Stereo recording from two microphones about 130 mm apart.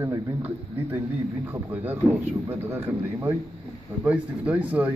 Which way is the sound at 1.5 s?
10° right (ahead or behind).